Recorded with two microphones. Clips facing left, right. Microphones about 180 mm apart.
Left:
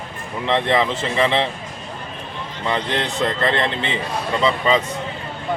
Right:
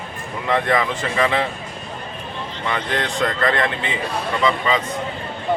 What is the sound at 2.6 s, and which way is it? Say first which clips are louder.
Speech: left 2 dB; 25° left (ahead or behind).